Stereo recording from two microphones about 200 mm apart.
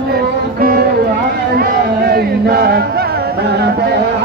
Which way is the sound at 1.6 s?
50° right (ahead or behind).